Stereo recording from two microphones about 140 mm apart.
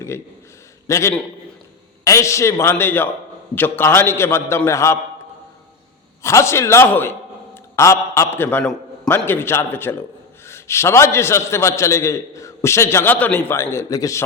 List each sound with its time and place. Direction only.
0.9 s a man's voice: 20° left (ahead or behind)
6.2 s a man's voice: 20° left (ahead or behind)